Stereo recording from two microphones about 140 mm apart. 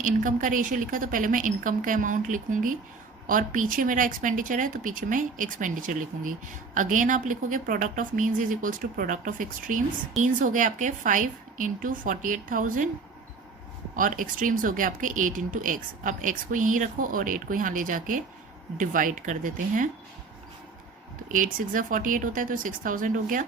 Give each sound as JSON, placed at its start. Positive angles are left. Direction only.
{"t": 0.0, "sound": "speech", "side_deg": -65}
{"t": 13.9, "sound": "speech", "side_deg": -75}
{"t": 21.2, "sound": "speech", "side_deg": -70}